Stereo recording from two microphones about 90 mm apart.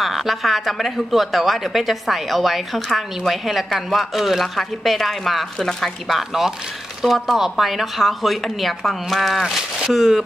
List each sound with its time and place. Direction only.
0.0 s speech: centre (ahead or behind)